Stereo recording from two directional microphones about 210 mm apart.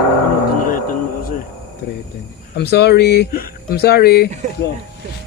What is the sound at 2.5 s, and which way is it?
A man's voice, 50° left (ahead or behind).